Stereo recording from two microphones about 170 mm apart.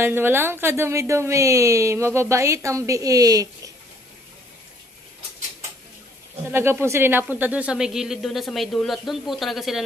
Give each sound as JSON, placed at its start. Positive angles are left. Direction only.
{"t": 0.0, "sound": "speech", "side_deg": -15}
{"t": 6.5, "sound": "speech", "side_deg": -15}